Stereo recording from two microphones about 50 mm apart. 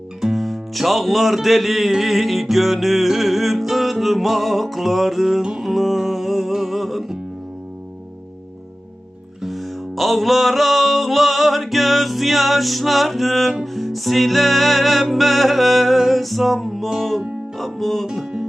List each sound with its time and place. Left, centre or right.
0.2 s music: centre
9.4 s music: centre
18.0 s music: centre